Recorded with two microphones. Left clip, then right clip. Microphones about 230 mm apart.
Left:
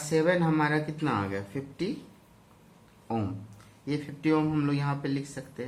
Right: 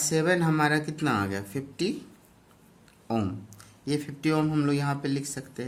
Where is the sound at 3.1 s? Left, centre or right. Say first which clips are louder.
Right 3 dB; right.